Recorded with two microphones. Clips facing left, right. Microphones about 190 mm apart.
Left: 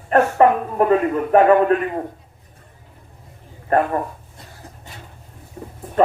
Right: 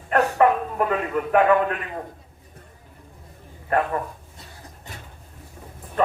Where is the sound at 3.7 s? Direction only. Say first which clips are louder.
Left 5 dB; 40° left (ahead or behind).